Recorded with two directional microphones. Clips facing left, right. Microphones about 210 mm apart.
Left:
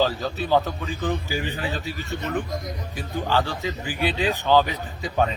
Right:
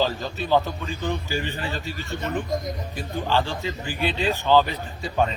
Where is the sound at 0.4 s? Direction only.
15° left (ahead or behind).